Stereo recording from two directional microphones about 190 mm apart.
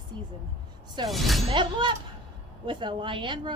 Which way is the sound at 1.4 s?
25° right (ahead or behind).